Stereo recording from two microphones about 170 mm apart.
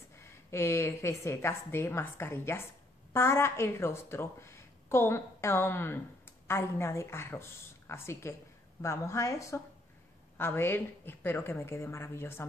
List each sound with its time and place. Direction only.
0.2 s a woman's voice: 15° left (ahead or behind)